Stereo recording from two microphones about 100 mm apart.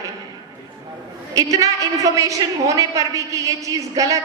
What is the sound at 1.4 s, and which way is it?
A man's voice, 35° right (ahead or behind).